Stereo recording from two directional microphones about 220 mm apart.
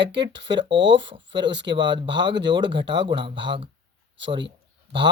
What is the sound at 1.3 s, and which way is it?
Speech, 55° right (ahead or behind).